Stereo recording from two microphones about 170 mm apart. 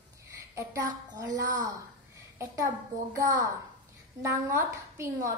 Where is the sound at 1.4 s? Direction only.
20° right (ahead or behind).